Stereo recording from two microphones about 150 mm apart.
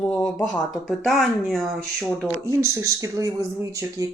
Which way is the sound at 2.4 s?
20° right (ahead or behind).